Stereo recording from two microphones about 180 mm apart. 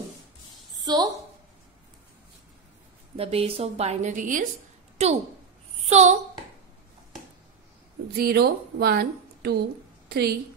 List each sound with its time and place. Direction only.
0.7 s a woman's voice: 20° right (ahead or behind)
3.2 s a woman's voice: 35° right (ahead or behind)
8.2 s a woman's voice: 60° right (ahead or behind)
10.0 s a sound: 60° right (ahead or behind)